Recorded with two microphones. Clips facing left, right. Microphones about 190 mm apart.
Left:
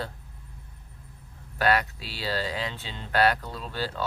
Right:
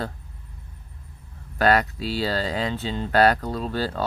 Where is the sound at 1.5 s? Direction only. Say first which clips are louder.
Right 5 dB; 40° right (ahead or behind).